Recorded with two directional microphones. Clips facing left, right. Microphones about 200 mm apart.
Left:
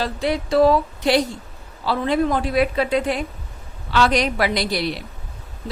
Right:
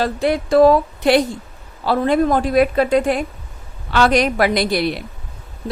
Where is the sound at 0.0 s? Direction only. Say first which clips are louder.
Right 4 dB; 50° right (ahead or behind).